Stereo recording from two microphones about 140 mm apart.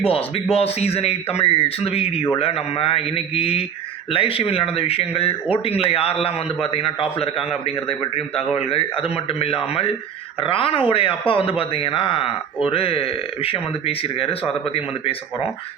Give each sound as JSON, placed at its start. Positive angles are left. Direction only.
{"t": 0.0, "sound": "a man's voice", "side_deg": 45}